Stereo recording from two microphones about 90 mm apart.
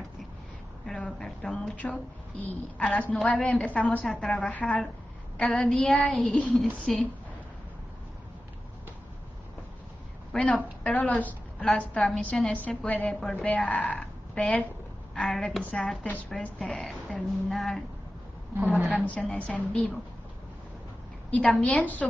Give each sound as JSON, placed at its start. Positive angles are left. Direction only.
{"t": 0.8, "sound": "a woman's voice", "side_deg": 10}
{"t": 4.5, "sound": "a woman's voice", "side_deg": 15}
{"t": 6.6, "sound": "a woman's voice", "side_deg": 5}
{"t": 10.3, "sound": "a woman's voice", "side_deg": 15}
{"t": 18.9, "sound": "a woman's voice", "side_deg": 15}
{"t": 21.3, "sound": "a woman's voice", "side_deg": 10}